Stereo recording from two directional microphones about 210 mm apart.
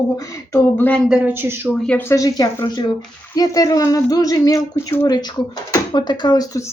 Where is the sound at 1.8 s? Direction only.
5° left (ahead or behind).